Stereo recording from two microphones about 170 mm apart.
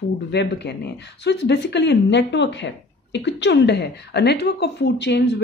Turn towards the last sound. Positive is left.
turn(degrees=90)